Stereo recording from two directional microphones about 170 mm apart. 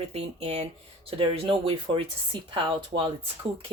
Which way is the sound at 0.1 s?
35° right (ahead or behind).